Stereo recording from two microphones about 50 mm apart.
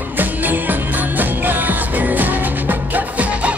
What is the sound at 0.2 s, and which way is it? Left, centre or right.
Music, right.